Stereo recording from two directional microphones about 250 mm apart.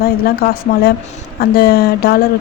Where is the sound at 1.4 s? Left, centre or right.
Left.